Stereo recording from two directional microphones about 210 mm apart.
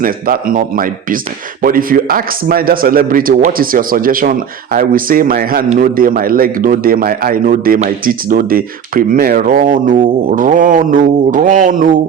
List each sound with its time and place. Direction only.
0.0 s a man's voice: 40° right (ahead or behind)